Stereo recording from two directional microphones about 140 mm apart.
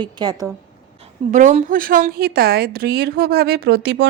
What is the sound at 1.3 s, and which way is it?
A woman's voice, 60° right (ahead or behind).